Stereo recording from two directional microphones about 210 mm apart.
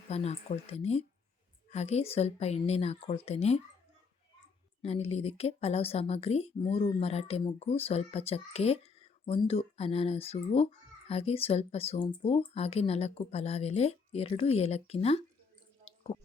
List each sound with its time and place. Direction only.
0.1 s a child's voice: 30° left (ahead or behind)
4.8 s a child's voice: 30° left (ahead or behind)